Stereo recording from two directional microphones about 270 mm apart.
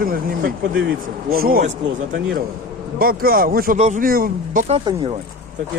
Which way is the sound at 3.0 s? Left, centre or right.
Right.